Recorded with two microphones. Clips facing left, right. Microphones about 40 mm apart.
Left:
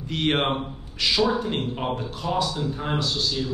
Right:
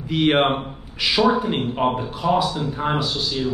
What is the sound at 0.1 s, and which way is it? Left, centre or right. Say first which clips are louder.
Speech: right 6 dB; centre.